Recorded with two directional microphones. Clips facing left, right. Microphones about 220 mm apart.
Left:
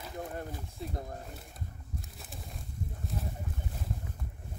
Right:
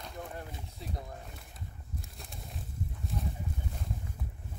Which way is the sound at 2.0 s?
Centre (ahead or behind).